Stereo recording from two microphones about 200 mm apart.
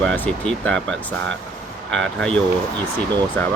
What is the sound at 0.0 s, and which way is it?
Speech, 5° left (ahead or behind).